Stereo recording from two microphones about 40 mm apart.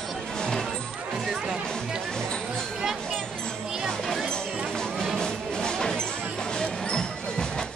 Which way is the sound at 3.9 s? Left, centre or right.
Centre.